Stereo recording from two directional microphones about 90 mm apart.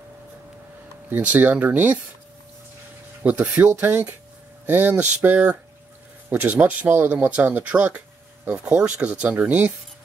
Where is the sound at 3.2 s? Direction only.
15° right (ahead or behind).